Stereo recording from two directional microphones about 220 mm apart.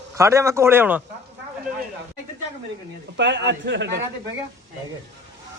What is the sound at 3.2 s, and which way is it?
Speech, 55° right (ahead or behind).